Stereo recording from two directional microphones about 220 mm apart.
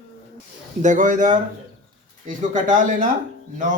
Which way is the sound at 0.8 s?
35° right (ahead or behind).